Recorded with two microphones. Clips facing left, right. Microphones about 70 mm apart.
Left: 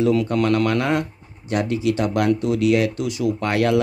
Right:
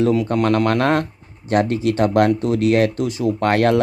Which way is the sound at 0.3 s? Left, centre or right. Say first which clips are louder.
Right 2 dB; right.